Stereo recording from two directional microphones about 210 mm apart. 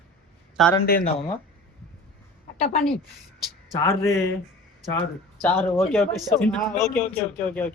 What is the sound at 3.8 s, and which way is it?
Speech, 15° left (ahead or behind).